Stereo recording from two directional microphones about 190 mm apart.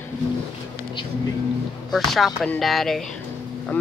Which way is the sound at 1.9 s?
Centre (ahead or behind).